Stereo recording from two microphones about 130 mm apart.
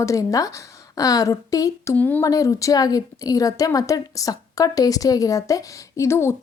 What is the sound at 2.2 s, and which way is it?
A woman's voice, 25° left (ahead or behind).